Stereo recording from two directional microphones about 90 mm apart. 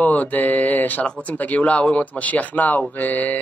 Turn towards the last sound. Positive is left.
turn(degrees=15)  # may be behind; listen again after turning